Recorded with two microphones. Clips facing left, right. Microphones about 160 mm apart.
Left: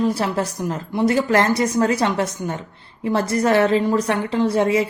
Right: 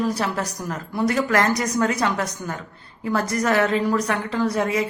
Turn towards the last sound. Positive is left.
turn(degrees=30)  # may be behind; listen again after turning